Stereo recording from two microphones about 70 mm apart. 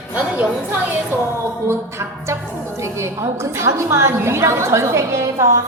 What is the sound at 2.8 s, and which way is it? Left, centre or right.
A woman's voice, right.